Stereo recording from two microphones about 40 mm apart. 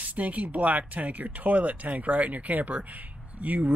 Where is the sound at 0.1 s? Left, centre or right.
Right.